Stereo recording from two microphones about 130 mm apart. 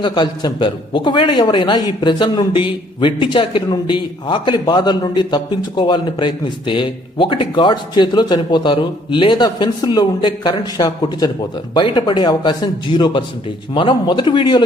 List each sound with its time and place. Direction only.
0.0 s a man's voice: 35° left (ahead or behind)